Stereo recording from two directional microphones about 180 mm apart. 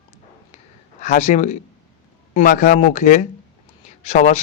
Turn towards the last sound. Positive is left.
turn(degrees=40)  # may be behind; listen again after turning